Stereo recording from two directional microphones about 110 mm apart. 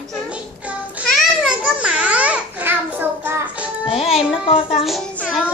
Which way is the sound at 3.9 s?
60° left (ahead or behind).